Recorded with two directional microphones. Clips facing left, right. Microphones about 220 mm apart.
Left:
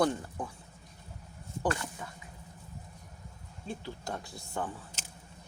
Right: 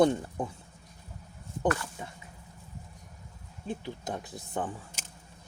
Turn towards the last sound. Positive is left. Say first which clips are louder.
# right 2 dB
turn(degrees=-15)  # may be behind; listen again after turning